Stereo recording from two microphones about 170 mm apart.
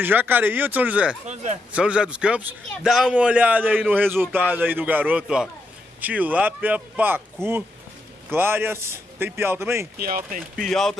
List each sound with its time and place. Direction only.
0.0 s a man's voice: 10° right (ahead or behind)
1.2 s speech: 40° right (ahead or behind)
1.7 s a man's voice: 5° right (ahead or behind)
9.9 s speech: 60° right (ahead or behind)
10.5 s speech: centre (ahead or behind)